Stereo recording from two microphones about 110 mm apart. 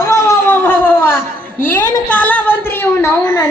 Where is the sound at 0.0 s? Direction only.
30° left (ahead or behind).